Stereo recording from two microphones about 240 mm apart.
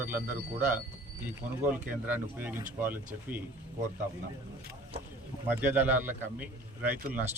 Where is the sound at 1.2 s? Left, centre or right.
Centre.